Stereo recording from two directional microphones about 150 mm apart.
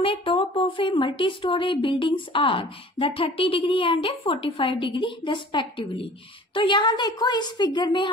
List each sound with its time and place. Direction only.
0.0 s a woman's voice: 35° left (ahead or behind)